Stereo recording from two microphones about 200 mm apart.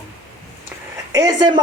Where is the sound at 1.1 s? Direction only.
20° right (ahead or behind).